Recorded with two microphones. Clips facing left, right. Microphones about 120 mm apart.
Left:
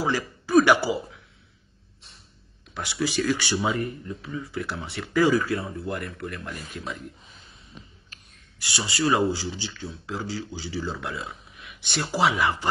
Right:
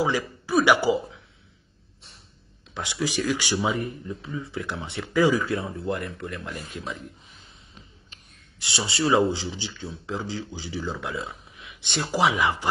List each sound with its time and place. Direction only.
0.0 s speech: 15° right (ahead or behind)
2.7 s speech: 15° right (ahead or behind)
8.1 s speech: 25° right (ahead or behind)